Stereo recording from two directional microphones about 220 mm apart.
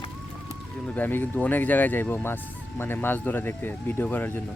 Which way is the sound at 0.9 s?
10° left (ahead or behind).